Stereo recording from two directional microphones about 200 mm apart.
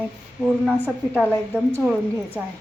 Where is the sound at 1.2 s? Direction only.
10° left (ahead or behind).